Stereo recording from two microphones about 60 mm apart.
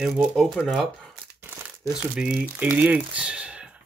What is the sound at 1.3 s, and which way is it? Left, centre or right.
Crumpling, right.